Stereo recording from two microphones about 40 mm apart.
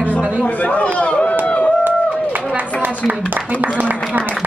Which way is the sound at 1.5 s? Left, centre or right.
Left.